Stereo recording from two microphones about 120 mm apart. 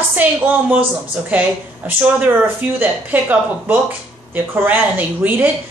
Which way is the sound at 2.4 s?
15° right (ahead or behind).